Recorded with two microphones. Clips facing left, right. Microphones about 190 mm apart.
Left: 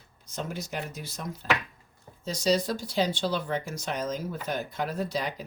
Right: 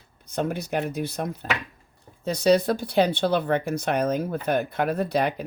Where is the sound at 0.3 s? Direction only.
60° right (ahead or behind).